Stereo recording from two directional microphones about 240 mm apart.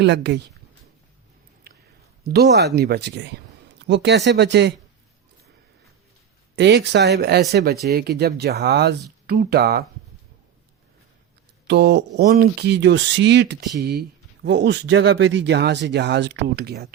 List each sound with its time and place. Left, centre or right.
0.0 s speech: right
1.7 s a sound: right
2.2 s speech: right
6.6 s speech: right
11.7 s speech: right